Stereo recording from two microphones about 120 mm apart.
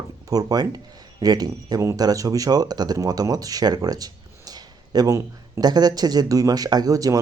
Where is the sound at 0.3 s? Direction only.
30° right (ahead or behind).